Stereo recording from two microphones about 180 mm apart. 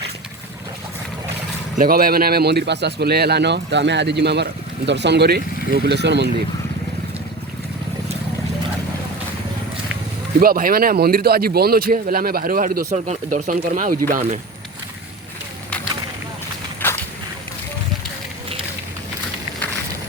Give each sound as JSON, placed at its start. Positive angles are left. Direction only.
{"t": 1.8, "sound": "speech", "side_deg": -55}
{"t": 10.4, "sound": "speech", "side_deg": -55}
{"t": 16.8, "sound": "a sound", "side_deg": 10}